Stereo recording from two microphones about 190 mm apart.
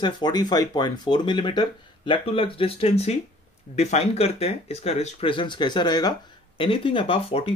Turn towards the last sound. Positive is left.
turn(degrees=30)  # may be behind; listen again after turning